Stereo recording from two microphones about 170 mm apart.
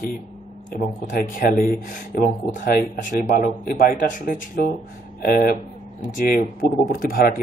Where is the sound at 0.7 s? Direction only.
50° left (ahead or behind).